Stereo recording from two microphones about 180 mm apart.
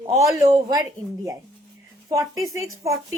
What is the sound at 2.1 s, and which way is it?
Speech, 20° right (ahead or behind).